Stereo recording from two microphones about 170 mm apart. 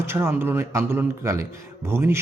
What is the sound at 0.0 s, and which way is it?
A man's voice, 15° right (ahead or behind).